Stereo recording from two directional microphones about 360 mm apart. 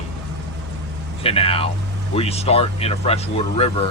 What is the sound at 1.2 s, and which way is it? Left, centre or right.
Speech, centre.